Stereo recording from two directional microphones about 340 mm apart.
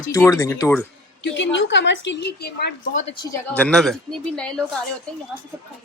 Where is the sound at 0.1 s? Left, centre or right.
Centre.